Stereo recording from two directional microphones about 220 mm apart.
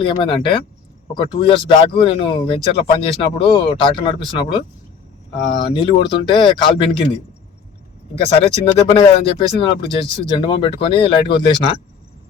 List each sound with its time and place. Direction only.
0.0 s speech: 20° left (ahead or behind)
8.1 s speech: 25° left (ahead or behind)